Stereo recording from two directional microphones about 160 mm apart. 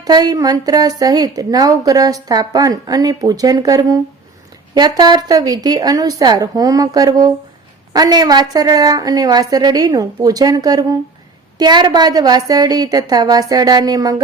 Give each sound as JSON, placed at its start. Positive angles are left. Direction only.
{"t": 0.0, "sound": "a woman's voice", "side_deg": -25}